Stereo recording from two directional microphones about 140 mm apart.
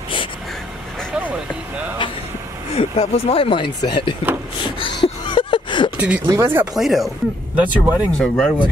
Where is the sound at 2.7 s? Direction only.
45° left (ahead or behind).